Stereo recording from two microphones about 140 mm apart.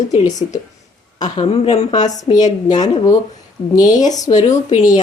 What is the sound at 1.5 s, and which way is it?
Speech, 45° left (ahead or behind).